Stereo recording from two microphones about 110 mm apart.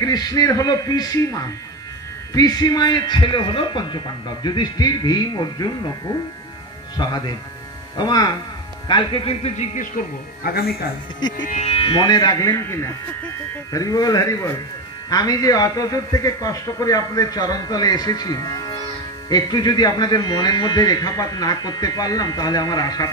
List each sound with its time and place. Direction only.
0.0 s a man's voice: 35° left (ahead or behind)
7.0 s a man's voice: 40° left (ahead or behind)
9.2 s speech: 70° left (ahead or behind)
11.1 s speech: 40° left (ahead or behind)
11.5 s a man's voice: 60° left (ahead or behind); by 23.1 s 35° left (ahead or behind)